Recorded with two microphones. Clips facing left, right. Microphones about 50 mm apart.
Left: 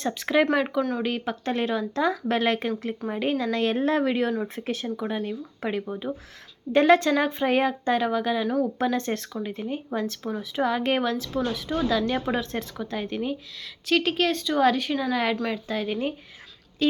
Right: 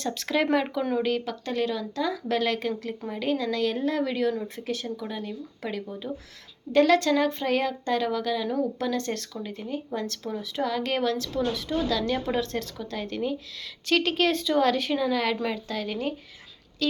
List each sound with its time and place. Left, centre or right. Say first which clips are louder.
0.1 s speech: left 2 dB; centre
1.3 s speech: left 2 dB; left; by 11.7 s centre
11.7 s speech: left 4 dB; left
13.8 s speech: even; centre